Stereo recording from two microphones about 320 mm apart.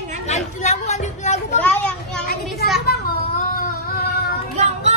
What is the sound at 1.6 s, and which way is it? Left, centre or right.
Children playing, centre.